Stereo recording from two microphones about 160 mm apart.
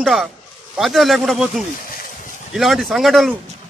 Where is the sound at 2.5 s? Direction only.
Centre (ahead or behind).